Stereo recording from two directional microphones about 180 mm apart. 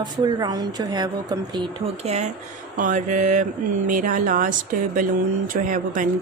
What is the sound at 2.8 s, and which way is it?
Speech, 45° right (ahead or behind).